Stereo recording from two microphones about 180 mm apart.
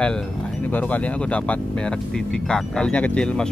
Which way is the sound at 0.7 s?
10° left (ahead or behind).